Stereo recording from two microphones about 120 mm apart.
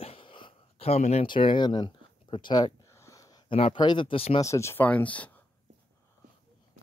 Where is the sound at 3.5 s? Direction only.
45° left (ahead or behind).